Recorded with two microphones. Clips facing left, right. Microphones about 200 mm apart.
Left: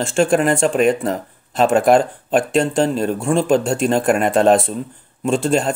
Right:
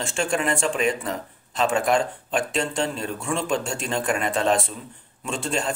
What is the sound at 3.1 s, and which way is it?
Speech, 30° left (ahead or behind).